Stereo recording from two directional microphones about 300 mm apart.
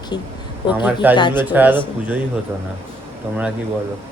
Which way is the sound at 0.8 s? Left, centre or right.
Centre.